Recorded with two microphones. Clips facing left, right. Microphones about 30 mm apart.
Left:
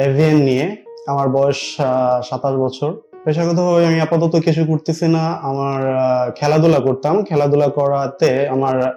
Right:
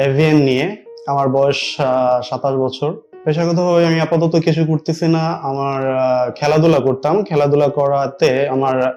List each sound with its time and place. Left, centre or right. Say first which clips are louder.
0.0 s speech: right 1 dB; right
7.1 s speech: right 1 dB; right